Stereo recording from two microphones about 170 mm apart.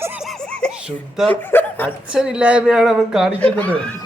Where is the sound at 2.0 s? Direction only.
5° right (ahead or behind).